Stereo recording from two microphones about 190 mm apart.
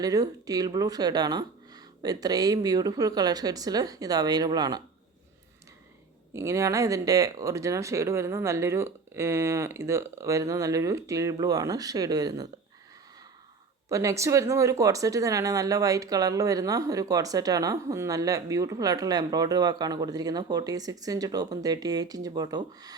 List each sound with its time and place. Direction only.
0.0 s speech: 20° right (ahead or behind)
6.3 s speech: 15° right (ahead or behind)
13.9 s speech: 15° right (ahead or behind)